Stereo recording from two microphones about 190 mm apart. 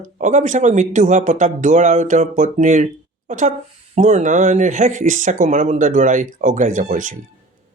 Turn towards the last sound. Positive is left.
turn(degrees=-45)  # may be behind; listen again after turning